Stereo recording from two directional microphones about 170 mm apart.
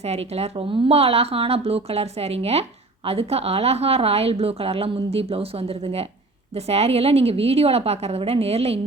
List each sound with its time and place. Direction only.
0.0 s a woman's voice: 35° right (ahead or behind)